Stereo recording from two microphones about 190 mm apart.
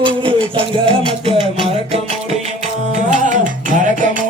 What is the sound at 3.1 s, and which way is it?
Music, 40° right (ahead or behind).